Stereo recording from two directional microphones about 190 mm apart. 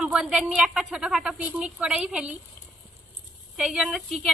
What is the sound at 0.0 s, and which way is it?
A woman's voice, 5° right (ahead or behind).